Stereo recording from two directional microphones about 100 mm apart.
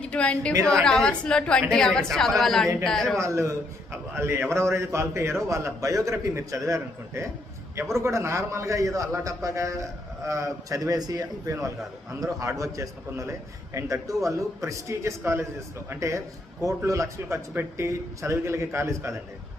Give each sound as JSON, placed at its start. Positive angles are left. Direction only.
{"t": 0.0, "sound": "a woman's voice", "side_deg": 10}
{"t": 3.2, "sound": "a man's voice", "side_deg": -30}